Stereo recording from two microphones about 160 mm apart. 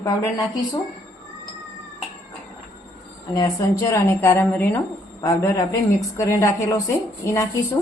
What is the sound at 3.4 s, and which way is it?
A woman's voice, 20° left (ahead or behind).